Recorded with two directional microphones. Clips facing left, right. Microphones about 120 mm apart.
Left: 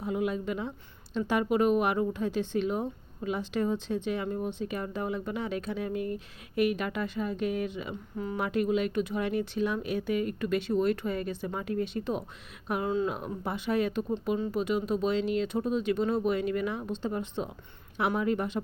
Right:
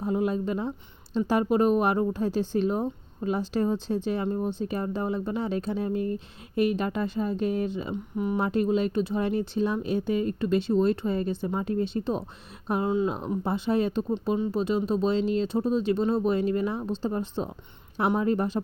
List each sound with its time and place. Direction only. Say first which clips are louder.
0.0 s a woman's voice: right 4 dB; 35° right (ahead or behind)
8.1 s speech: right 7 dB; 20° right (ahead or behind)
8.4 s a woman's voice: right 2 dB; 30° right (ahead or behind)
12.9 s speech: right 3 dB; 20° right (ahead or behind)
13.1 s a woman's voice: right 6 dB; 30° right (ahead or behind)